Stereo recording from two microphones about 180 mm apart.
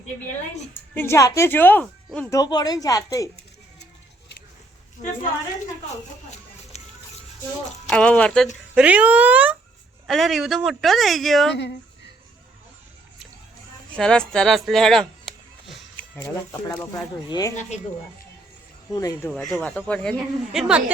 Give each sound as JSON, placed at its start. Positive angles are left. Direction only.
{"t": 0.9, "sound": "speech", "side_deg": 15}
{"t": 2.3, "sound": "speech", "side_deg": 20}
{"t": 6.7, "sound": "music", "side_deg": 35}
{"t": 7.9, "sound": "speech", "side_deg": 5}
{"t": 8.7, "sound": "speech", "side_deg": -5}
{"t": 13.9, "sound": "speech", "side_deg": 5}
{"t": 18.9, "sound": "speech", "side_deg": 15}
{"t": 19.3, "sound": "speech", "side_deg": 5}